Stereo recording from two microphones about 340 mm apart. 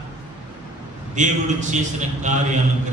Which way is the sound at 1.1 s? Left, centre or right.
Right.